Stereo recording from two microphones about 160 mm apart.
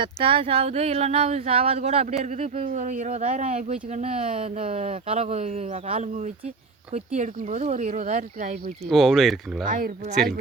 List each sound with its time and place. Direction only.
0.0 s speech: 35° right (ahead or behind); by 8.7 s 50° right (ahead or behind)
8.9 s speech: centre (ahead or behind)
9.6 s speech: 60° right (ahead or behind)